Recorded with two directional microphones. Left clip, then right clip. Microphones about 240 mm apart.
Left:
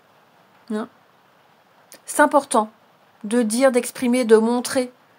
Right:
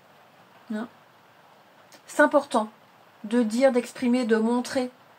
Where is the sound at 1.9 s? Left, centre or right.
Left.